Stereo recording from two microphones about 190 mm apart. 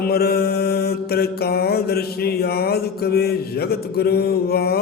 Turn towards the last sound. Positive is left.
turn(degrees=55)  # may be behind; listen again after turning